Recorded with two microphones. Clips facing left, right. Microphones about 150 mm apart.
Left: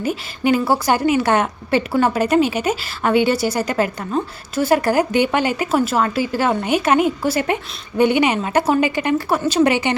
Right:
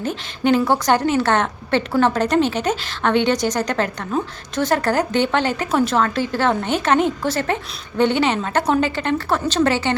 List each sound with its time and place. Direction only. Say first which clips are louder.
0.0 s a woman's voice: left 1 dB; 10° left (ahead or behind)